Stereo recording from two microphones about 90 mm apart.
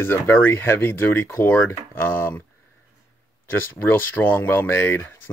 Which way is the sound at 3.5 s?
25° left (ahead or behind).